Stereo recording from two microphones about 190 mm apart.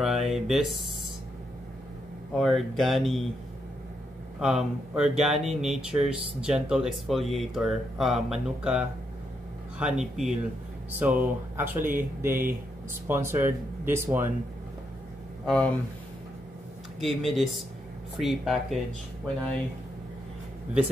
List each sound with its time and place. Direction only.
0.0 s a sound: centre (ahead or behind)
2.3 s speech: centre (ahead or behind)
4.4 s speech: 5° right (ahead or behind)
11.8 s speech: 45° right (ahead or behind)
12.2 s speech: 10° right (ahead or behind)
15.4 s speech: 5° left (ahead or behind)
17.0 s speech: centre (ahead or behind)